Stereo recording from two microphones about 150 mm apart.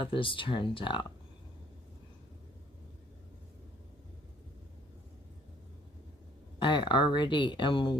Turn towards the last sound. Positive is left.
turn(degrees=35)  # may be behind; listen again after turning